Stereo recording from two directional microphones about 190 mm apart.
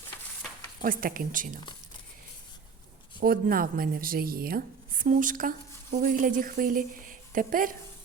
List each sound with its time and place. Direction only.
0.8 s speech: 50° right (ahead or behind)
3.2 s speech: 50° right (ahead or behind)